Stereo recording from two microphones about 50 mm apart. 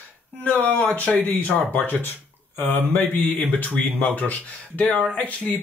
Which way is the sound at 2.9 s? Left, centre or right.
Left.